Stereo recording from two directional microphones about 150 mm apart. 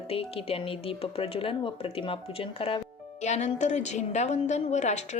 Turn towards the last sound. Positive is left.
turn(degrees=50)  # may be behind; listen again after turning